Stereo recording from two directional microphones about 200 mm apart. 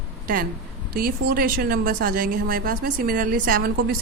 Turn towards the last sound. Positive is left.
turn(degrees=-45)  # may be behind; listen again after turning